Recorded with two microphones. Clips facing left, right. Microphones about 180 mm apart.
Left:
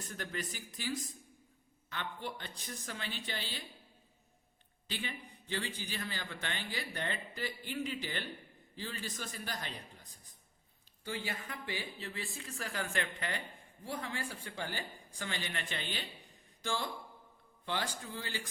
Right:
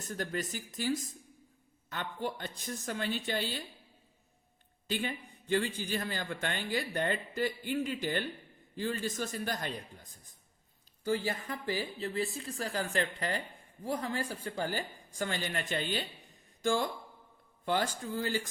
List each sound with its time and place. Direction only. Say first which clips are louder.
0.0 s a man's voice: right 5 dB; 45° right (ahead or behind)
4.9 s a man's voice: right 7 dB; 50° right (ahead or behind)
11.0 s a man's voice: right 8 dB; 40° right (ahead or behind)